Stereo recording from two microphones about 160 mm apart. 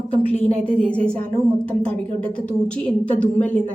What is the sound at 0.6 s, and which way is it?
A woman's voice, 10° left (ahead or behind).